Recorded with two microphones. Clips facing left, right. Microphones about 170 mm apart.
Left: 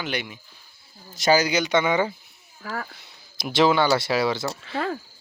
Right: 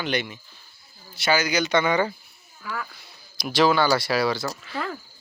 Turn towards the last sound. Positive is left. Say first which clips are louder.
# left 3 dB
turn(degrees=30)  # may be behind; listen again after turning